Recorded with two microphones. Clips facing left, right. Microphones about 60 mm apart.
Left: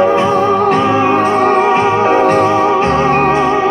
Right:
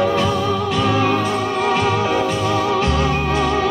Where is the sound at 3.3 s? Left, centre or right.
Left.